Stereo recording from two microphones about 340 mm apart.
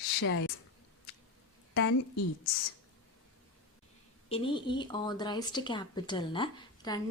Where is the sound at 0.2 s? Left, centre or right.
Left.